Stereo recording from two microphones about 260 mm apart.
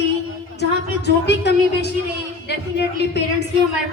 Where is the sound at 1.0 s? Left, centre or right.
Left.